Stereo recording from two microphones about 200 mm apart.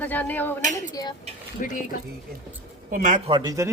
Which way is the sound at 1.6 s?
40° left (ahead or behind).